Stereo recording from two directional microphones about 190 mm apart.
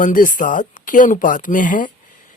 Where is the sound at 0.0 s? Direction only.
45° left (ahead or behind).